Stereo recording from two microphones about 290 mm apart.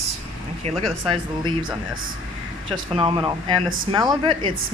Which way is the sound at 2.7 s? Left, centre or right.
Centre.